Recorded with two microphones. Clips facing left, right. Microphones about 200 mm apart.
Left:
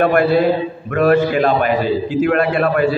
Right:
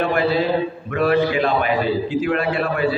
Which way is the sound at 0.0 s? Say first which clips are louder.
Left 6 dB; 55° left (ahead or behind).